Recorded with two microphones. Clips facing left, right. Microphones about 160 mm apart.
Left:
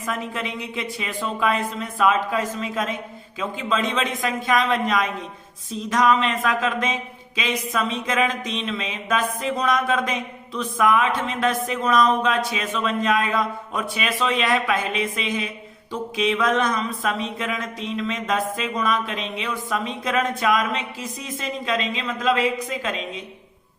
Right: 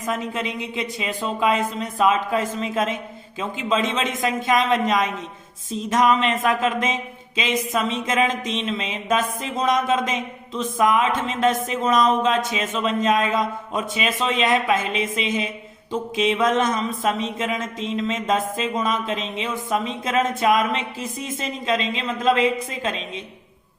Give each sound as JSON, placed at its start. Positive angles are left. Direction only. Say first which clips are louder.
{"t": 0.0, "sound": "speech", "louder": "right 2 dB", "side_deg": -20}